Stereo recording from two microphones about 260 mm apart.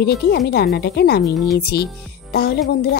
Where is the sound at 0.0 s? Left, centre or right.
Left.